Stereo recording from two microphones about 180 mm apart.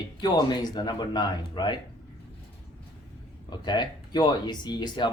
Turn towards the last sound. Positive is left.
turn(degrees=25)  # may be behind; listen again after turning